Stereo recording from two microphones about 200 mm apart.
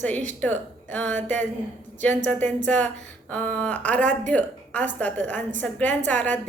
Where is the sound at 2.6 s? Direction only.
5° left (ahead or behind).